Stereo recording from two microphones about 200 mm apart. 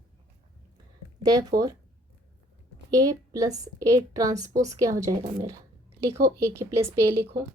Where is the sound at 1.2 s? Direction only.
20° right (ahead or behind).